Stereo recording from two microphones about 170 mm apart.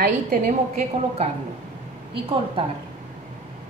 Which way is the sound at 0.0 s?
45° right (ahead or behind).